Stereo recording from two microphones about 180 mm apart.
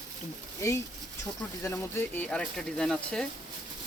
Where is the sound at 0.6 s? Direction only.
15° left (ahead or behind).